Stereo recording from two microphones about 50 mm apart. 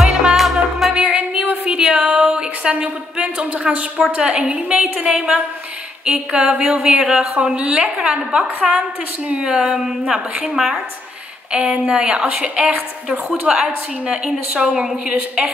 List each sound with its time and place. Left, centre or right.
0.0 s music: centre
1.1 s a sound: right
2.7 s a sound: right
3.7 s a woman's voice: centre
13.5 s a woman's voice: centre
14.0 s a woman's voice: centre